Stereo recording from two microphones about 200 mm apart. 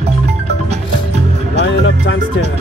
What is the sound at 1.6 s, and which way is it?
Music, 65° left (ahead or behind).